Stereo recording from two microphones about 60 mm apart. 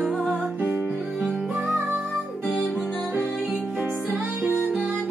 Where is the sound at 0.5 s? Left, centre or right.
Right.